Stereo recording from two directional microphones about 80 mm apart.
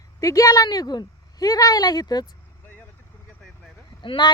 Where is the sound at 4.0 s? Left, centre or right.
Left.